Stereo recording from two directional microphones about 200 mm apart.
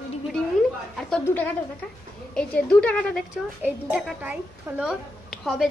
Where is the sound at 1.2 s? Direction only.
10° left (ahead or behind).